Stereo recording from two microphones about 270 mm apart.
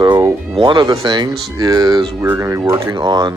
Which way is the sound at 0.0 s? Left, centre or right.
Centre.